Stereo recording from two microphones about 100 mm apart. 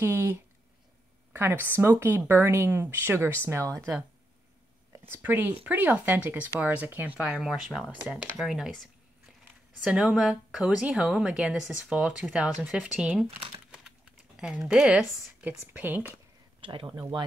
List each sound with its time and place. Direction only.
0.0 s speech: 20° right (ahead or behind)
5.0 s a woman's voice: 20° right (ahead or behind); by 8.8 s centre (ahead or behind)
9.8 s a woman's voice: 5° right (ahead or behind)
14.4 s speech: 5° right (ahead or behind)
15.4 s a woman's voice: 15° right (ahead or behind)
16.6 s speech: 60° right (ahead or behind)